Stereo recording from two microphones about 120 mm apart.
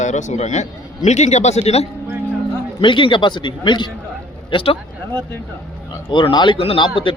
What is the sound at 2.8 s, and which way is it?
A man's voice, 45° left (ahead or behind).